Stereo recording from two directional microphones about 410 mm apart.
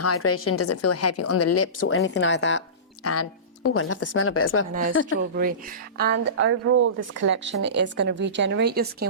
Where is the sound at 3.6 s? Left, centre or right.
Left.